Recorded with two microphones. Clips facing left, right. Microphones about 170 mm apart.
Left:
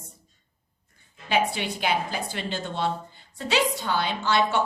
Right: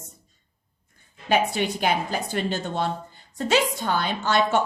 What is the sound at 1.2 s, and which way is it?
A woman's voice, 45° right (ahead or behind).